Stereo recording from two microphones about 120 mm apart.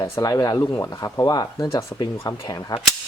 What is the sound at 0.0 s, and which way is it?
Speech, 30° left (ahead or behind).